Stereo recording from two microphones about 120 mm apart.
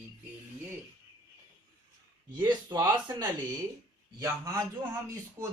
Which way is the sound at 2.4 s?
35° right (ahead or behind).